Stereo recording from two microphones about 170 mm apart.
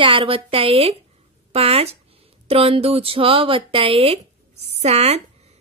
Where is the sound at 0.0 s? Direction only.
30° right (ahead or behind).